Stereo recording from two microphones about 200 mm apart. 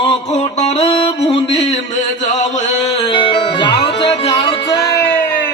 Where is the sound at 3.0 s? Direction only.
25° left (ahead or behind).